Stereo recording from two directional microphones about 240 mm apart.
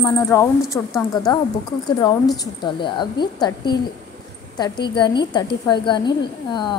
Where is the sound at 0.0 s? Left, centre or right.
Centre.